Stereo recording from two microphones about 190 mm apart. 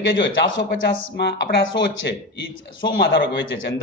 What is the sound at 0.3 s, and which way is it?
Speech, 65° left (ahead or behind).